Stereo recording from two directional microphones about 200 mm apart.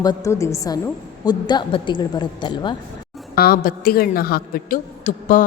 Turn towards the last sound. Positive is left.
turn(degrees=40)  # may be behind; listen again after turning